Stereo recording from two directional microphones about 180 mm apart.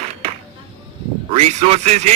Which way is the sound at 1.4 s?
35° right (ahead or behind).